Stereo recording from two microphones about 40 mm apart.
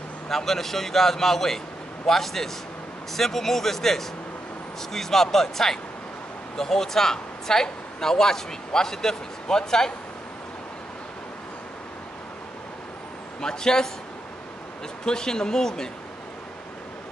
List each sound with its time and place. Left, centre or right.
0.3 s speech: centre
13.4 s speech: centre
15.0 s speech: centre